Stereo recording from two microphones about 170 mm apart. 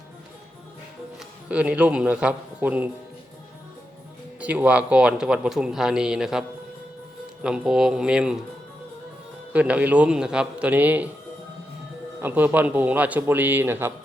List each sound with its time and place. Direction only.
1.5 s a man's voice: 5° right (ahead or behind)
4.4 s speech: 10° right (ahead or behind)
7.4 s speech: 5° right (ahead or behind)
9.5 s a man's voice: 10° right (ahead or behind)
12.2 s a man's voice: 10° right (ahead or behind)